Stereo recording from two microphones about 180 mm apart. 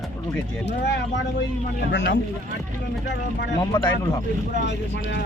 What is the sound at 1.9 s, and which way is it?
Speech, 75° left (ahead or behind).